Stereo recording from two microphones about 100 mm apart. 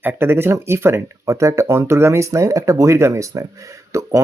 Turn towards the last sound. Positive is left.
turn(degrees=-30)  # may be behind; listen again after turning